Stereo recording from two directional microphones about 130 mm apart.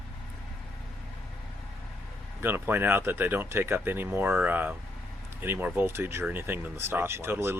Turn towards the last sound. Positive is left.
turn(degrees=-15)  # may be behind; listen again after turning